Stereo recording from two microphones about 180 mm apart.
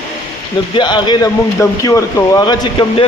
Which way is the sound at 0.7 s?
25° left (ahead or behind).